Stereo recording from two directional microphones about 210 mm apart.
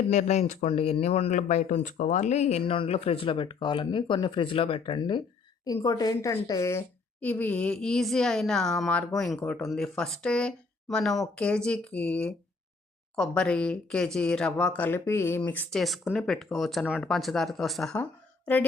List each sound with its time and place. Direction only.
0.1 s speech: 35° left (ahead or behind); by 18.6 s 10° left (ahead or behind)